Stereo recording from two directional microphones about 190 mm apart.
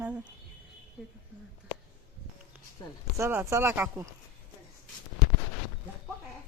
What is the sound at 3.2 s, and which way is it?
Speech, 15° right (ahead or behind).